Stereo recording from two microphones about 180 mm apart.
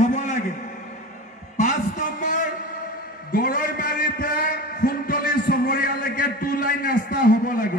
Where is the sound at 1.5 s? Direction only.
45° left (ahead or behind).